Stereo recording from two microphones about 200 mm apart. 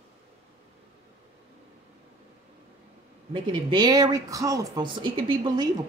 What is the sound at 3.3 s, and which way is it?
Speech, 25° right (ahead or behind).